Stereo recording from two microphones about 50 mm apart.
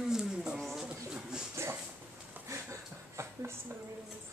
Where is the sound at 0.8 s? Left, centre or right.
Centre.